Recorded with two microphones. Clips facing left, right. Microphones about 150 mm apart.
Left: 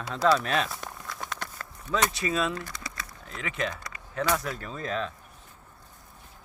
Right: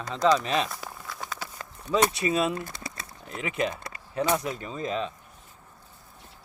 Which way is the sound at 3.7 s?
25° right (ahead or behind).